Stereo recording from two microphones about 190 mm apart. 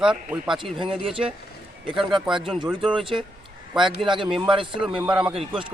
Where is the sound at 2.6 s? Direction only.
5° right (ahead or behind).